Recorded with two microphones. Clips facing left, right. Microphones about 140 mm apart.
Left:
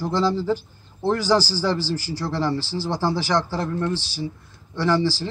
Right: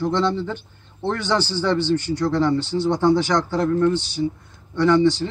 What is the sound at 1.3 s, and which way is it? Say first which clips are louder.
Speech: right 1 dB; 35° left (ahead or behind).